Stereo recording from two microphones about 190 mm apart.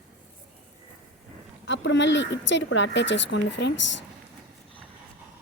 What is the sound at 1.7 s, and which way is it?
A woman's voice, 70° left (ahead or behind).